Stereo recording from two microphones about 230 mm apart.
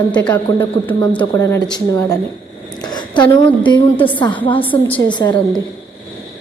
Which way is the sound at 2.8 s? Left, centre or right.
Centre.